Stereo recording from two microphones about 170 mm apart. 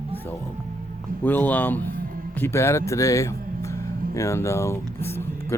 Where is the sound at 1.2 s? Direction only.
10° left (ahead or behind).